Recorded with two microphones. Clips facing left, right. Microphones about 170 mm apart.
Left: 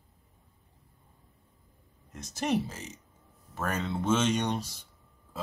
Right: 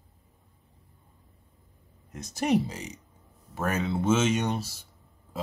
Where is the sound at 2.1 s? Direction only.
10° right (ahead or behind).